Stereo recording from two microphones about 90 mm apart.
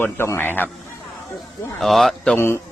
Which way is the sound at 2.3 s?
25° left (ahead or behind).